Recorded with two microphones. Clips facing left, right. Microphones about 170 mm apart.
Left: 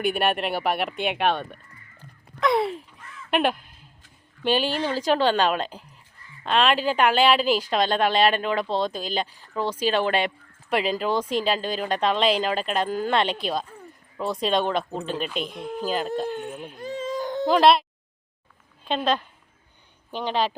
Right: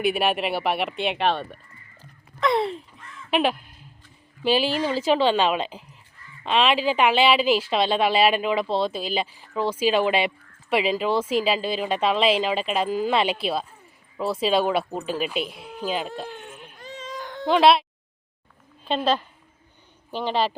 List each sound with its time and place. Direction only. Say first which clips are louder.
0.0 s speech: right 1 dB; centre (ahead or behind)
2.0 s a sound: even; centre (ahead or behind)
4.4 s speech: right 2 dB; 5° right (ahead or behind)
16.5 s baby cry: left 8 dB; 55° left (ahead or behind)
17.4 s speech: even; centre (ahead or behind)
18.9 s speech: right 1 dB; 5° right (ahead or behind)